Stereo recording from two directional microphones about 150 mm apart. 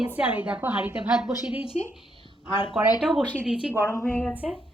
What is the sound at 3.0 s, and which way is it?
Speech, 5° right (ahead or behind).